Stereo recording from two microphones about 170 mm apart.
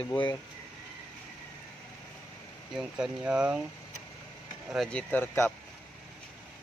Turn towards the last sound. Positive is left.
turn(degrees=10)  # may be behind; listen again after turning